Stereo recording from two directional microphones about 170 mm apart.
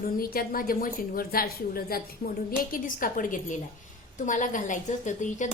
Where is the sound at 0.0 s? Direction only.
60° left (ahead or behind).